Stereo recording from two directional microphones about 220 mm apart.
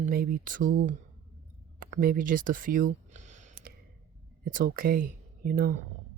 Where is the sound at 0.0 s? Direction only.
40° right (ahead or behind).